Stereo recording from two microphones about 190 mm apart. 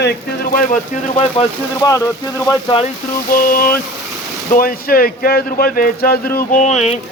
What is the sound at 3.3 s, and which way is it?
A man's voice, 50° left (ahead or behind).